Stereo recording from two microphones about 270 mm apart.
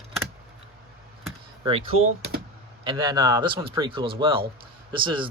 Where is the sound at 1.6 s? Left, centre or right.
Right.